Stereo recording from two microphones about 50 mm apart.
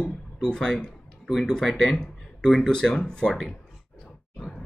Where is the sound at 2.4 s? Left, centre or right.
Centre.